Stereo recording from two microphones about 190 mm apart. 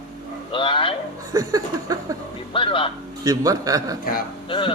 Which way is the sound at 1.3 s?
20° right (ahead or behind).